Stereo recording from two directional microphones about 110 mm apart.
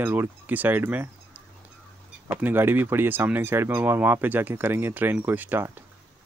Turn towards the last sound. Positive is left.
turn(degrees=-15)  # may be behind; listen again after turning